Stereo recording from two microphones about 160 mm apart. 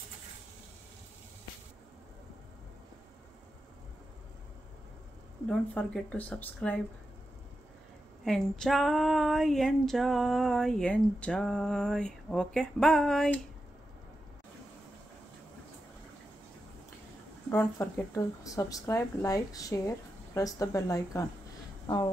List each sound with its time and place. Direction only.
5.5 s speech: 10° left (ahead or behind)
8.3 s female singing: 5° left (ahead or behind)
17.5 s speech: 15° left (ahead or behind)